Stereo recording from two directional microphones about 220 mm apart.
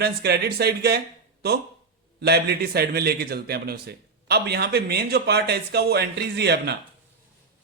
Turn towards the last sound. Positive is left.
turn(degrees=-50)  # may be behind; listen again after turning